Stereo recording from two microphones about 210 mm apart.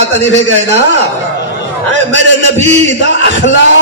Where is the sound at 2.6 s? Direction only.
35° right (ahead or behind).